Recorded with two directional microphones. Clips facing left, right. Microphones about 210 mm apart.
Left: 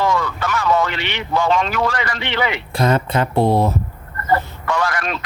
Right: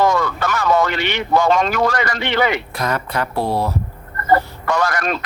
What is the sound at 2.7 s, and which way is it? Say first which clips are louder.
Speech: left 4 dB; 25° left (ahead or behind).